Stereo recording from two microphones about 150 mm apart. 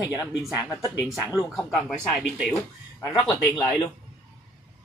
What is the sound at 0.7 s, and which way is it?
Speech, 20° left (ahead or behind).